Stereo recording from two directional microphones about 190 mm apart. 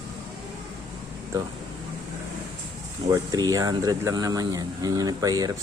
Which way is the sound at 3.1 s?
20° right (ahead or behind).